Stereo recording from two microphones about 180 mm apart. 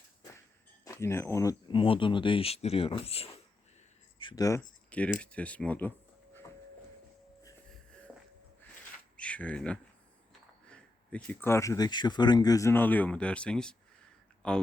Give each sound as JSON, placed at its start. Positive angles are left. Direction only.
{"t": 0.9, "sound": "speech", "side_deg": 15}
{"t": 4.9, "sound": "speech", "side_deg": 5}
{"t": 9.1, "sound": "a sound", "side_deg": 5}
{"t": 10.7, "sound": "speech", "side_deg": 10}